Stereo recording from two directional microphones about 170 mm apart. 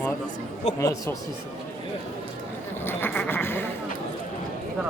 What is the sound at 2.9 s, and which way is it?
Speech, 10° left (ahead or behind).